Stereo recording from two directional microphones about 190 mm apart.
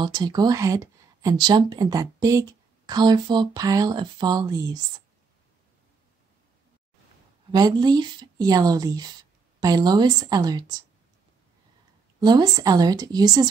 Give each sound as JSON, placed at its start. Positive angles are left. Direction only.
{"t": 0.0, "sound": "speech", "side_deg": -20}
{"t": 7.5, "sound": "speech", "side_deg": -20}
{"t": 12.2, "sound": "speech", "side_deg": -20}